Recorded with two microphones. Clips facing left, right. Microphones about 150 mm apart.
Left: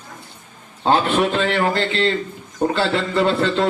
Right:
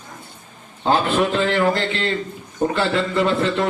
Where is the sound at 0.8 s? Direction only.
65° left (ahead or behind).